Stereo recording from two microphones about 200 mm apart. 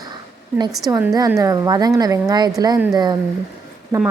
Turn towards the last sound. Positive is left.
turn(degrees=-15)  # may be behind; listen again after turning